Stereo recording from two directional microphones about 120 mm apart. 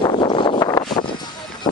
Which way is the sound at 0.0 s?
40° left (ahead or behind).